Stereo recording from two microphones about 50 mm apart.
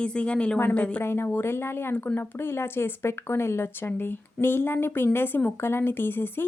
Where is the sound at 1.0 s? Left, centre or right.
Left.